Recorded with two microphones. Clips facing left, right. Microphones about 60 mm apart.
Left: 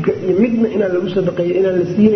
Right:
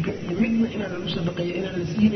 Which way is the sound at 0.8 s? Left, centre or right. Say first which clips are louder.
Left 13 dB; left.